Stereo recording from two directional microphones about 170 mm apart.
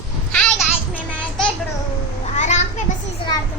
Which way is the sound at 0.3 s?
5° left (ahead or behind).